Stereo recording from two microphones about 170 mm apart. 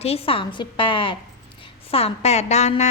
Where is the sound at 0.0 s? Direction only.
35° left (ahead or behind).